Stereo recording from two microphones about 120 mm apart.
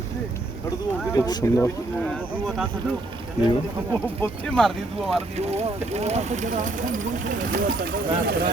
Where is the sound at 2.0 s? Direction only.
10° left (ahead or behind).